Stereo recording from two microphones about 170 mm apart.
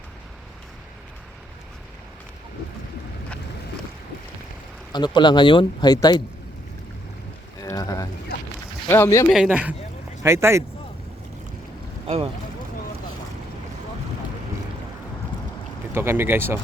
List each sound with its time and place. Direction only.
4.9 s speech: 25° left (ahead or behind)
7.6 s boat: 20° left (ahead or behind)
8.9 s speech: 15° left (ahead or behind)
9.3 s speech: 5° right (ahead or behind)
12.0 s speech: 35° right (ahead or behind)
16.0 s speech: 15° right (ahead or behind)